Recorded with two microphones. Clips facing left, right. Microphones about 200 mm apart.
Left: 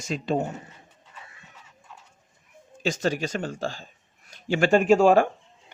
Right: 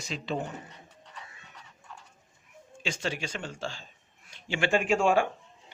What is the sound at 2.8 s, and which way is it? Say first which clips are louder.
Speech: left 8 dB; 45° left (ahead or behind).